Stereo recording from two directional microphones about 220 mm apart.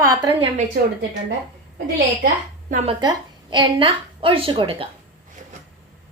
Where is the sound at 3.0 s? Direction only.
20° right (ahead or behind).